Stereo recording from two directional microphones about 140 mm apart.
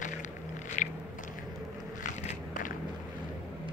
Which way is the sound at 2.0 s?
70° left (ahead or behind).